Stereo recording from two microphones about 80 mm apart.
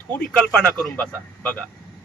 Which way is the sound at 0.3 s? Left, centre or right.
Centre.